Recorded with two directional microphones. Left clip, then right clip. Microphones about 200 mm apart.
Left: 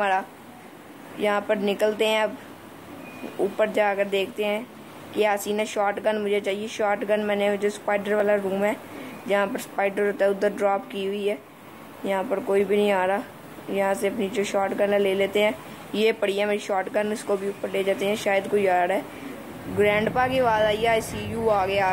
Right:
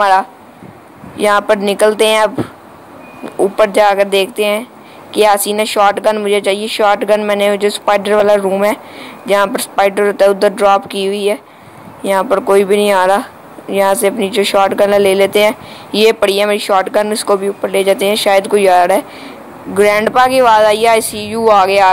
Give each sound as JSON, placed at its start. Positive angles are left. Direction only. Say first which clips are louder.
{"t": 1.2, "sound": "speech", "louder": "right 12 dB", "side_deg": -20}
{"t": 3.3, "sound": "speech", "louder": "right 12 dB", "side_deg": -20}